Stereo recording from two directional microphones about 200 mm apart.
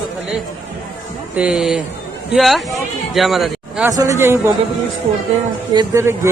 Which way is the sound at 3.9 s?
15° right (ahead or behind).